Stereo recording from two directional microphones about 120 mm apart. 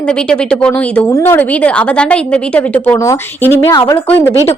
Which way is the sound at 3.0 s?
20° left (ahead or behind).